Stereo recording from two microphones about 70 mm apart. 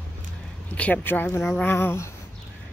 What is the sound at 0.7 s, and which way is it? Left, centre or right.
Speech, centre.